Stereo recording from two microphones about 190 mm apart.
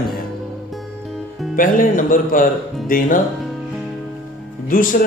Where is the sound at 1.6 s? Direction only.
45° left (ahead or behind).